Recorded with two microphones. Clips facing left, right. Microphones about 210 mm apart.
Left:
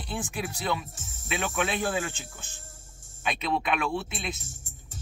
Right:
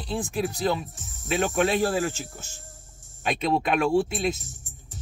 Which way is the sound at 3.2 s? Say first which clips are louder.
Right 5 dB; 45° right (ahead or behind).